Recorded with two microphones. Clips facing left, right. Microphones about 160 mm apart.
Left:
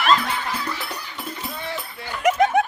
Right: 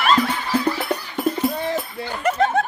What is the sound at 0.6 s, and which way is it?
Music, 50° right (ahead or behind).